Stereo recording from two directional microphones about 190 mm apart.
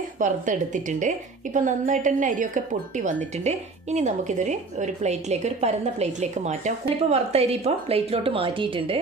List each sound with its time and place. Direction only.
0.2 s a woman's voice: 40° right (ahead or behind)